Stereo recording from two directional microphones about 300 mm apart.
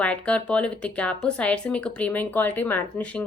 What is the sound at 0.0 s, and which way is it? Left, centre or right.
Speech, centre.